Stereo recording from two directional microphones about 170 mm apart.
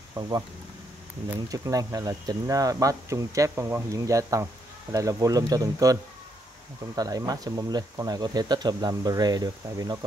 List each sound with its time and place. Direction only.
1.5 s speech: 20° right (ahead or behind)
7.0 s speech: 20° right (ahead or behind)